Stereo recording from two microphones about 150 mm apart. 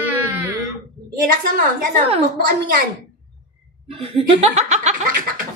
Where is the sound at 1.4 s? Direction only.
75° right (ahead or behind).